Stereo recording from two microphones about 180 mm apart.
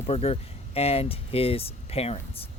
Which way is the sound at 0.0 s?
35° left (ahead or behind).